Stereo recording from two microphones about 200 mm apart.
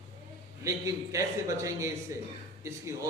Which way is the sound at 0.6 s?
15° right (ahead or behind).